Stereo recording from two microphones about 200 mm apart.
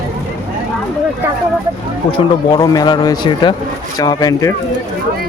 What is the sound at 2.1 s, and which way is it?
Speech, 20° left (ahead or behind).